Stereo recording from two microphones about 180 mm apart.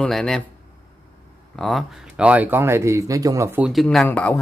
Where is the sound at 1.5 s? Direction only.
Centre (ahead or behind); by 3.7 s 15° right (ahead or behind).